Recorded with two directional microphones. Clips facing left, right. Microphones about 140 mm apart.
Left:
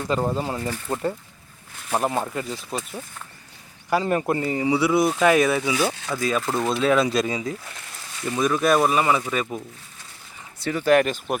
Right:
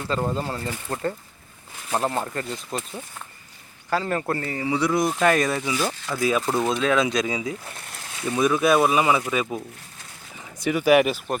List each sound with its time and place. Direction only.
0.0 s speech: 15° left (ahead or behind)
4.8 s speech: 5° left (ahead or behind)
6.1 s speech: 5° right (ahead or behind)
10.6 s speech: 10° right (ahead or behind)